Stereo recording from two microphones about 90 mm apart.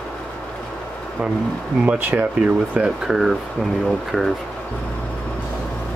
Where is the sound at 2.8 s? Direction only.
5° right (ahead or behind).